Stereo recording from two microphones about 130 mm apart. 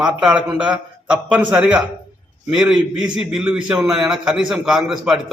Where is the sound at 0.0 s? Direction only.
5° right (ahead or behind).